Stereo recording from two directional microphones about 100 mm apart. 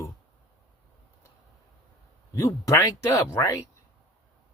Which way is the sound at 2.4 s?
35° left (ahead or behind).